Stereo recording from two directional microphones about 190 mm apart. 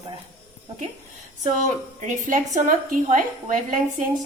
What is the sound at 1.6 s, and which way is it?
A woman's voice, 40° right (ahead or behind).